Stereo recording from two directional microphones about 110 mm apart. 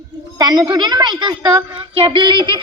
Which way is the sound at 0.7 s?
40° right (ahead or behind).